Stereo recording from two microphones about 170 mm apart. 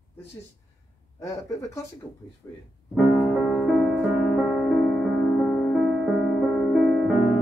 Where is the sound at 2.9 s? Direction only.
Centre (ahead or behind).